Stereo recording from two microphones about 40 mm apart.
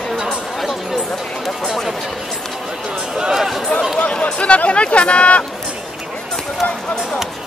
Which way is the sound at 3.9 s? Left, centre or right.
Left.